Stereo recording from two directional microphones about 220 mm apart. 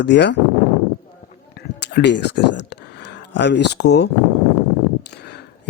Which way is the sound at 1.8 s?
50° left (ahead or behind).